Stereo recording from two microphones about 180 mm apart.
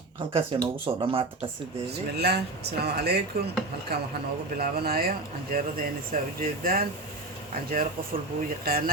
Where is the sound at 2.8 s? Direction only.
60° right (ahead or behind).